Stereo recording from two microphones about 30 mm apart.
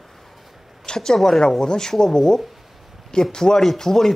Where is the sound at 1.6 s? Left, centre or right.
Left.